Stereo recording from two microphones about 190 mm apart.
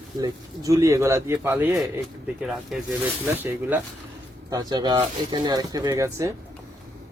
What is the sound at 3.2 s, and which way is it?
A man's voice, 10° right (ahead or behind).